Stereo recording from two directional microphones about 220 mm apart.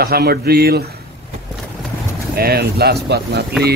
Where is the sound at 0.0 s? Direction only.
45° right (ahead or behind).